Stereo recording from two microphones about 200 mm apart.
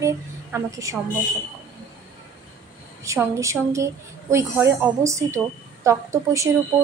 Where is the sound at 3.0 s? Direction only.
15° right (ahead or behind).